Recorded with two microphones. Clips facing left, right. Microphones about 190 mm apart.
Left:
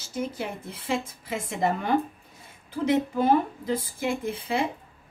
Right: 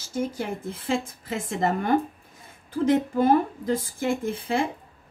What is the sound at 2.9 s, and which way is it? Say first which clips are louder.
Speech: right 1 dB; 50° right (ahead or behind).